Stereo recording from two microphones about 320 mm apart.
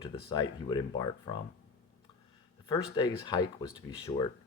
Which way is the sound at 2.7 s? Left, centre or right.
Centre.